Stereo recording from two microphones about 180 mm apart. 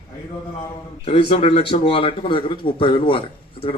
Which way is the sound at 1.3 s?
30° left (ahead or behind).